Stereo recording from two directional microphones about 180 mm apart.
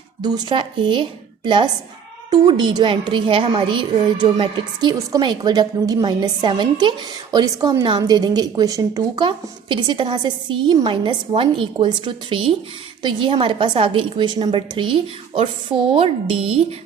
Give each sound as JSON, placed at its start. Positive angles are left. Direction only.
{"t": 0.2, "sound": "a woman's voice", "side_deg": -25}